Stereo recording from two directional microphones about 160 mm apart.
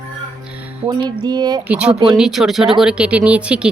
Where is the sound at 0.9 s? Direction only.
25° right (ahead or behind).